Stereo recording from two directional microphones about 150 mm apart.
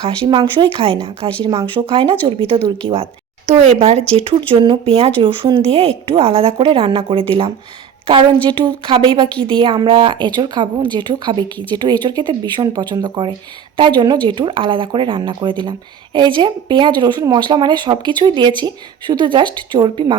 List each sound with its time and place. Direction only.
0.0 s speech: 35° right (ahead or behind)